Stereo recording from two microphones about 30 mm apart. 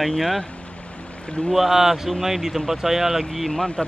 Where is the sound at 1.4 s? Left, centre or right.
Left.